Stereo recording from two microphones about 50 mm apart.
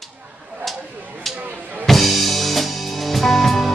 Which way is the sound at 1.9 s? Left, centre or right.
Centre.